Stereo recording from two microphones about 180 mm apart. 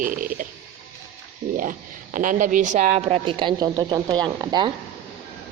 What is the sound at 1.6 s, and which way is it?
Speech, 50° right (ahead or behind).